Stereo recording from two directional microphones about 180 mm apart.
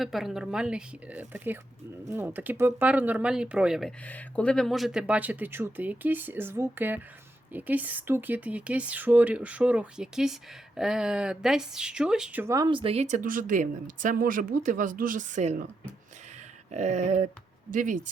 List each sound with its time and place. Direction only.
0.0 s speech: centre (ahead or behind); by 15.6 s 40° right (ahead or behind)
16.7 s speech: 40° right (ahead or behind)